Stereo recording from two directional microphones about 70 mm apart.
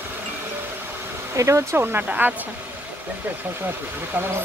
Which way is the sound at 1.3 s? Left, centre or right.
Right.